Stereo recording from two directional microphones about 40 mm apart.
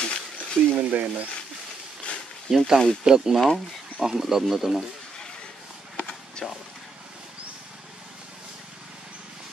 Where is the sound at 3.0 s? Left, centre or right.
Centre.